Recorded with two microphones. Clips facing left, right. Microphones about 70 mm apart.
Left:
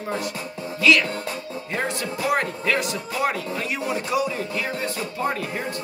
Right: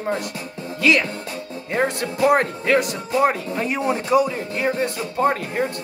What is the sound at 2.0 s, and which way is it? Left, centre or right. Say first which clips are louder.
Speech: right 7 dB; right.